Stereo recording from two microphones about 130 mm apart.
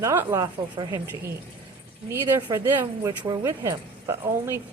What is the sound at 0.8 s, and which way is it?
Speech, 30° right (ahead or behind).